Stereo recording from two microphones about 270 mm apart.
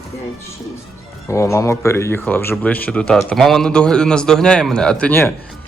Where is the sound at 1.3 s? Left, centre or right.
Centre.